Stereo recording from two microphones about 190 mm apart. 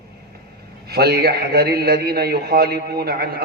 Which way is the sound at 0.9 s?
55° right (ahead or behind).